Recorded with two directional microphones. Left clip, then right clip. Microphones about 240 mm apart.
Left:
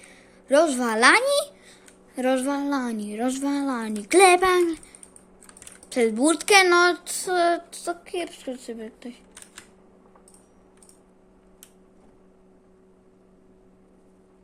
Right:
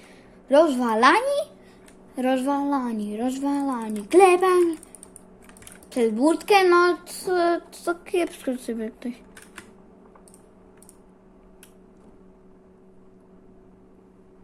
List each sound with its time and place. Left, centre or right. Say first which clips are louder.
0.1 s speech: right 1 dB; centre
5.9 s speech: even; centre